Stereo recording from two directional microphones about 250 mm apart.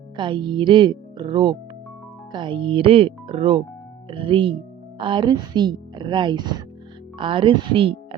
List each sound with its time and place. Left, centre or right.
0.2 s a woman's voice: centre